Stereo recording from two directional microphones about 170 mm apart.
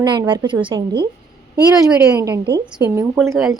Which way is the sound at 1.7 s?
5° right (ahead or behind).